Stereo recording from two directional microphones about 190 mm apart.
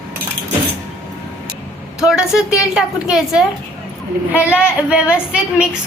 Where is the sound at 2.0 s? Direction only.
5° right (ahead or behind).